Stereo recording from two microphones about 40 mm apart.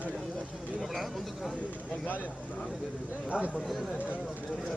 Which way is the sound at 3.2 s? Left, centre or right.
Right.